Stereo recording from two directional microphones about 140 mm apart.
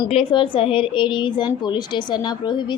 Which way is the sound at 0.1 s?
40° left (ahead or behind).